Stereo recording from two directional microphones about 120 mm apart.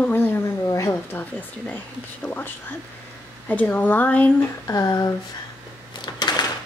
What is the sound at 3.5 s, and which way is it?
Speech, 15° left (ahead or behind).